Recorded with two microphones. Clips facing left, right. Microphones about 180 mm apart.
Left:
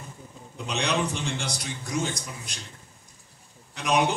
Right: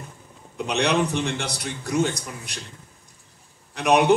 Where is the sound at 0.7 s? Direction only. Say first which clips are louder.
Right 5 dB; 65° right (ahead or behind).